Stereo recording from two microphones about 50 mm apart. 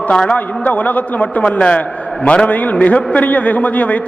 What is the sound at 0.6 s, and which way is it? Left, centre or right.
A man's voice, left.